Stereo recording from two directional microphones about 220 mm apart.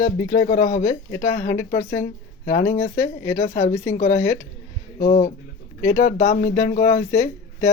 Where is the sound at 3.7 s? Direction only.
10° left (ahead or behind).